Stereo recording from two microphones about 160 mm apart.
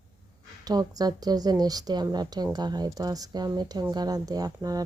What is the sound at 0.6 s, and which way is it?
A woman's voice, 25° right (ahead or behind).